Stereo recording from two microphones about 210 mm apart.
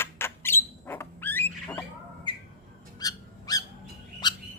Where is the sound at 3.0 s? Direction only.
20° left (ahead or behind).